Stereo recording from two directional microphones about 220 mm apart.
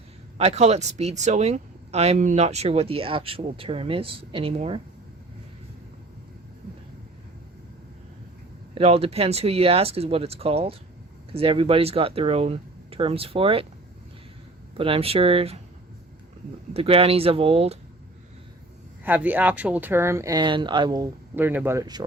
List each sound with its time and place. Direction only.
0.3 s speech: 30° right (ahead or behind)
8.7 s speech: 25° right (ahead or behind)
14.8 s speech: 25° right (ahead or behind)
16.7 s speech: 25° right (ahead or behind)
19.0 s speech: 10° right (ahead or behind)